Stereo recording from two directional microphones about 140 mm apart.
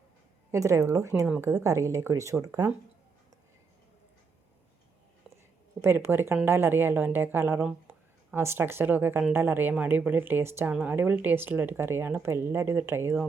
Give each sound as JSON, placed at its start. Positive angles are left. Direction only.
{"t": 0.5, "sound": "speech", "side_deg": -20}
{"t": 5.8, "sound": "speech", "side_deg": -15}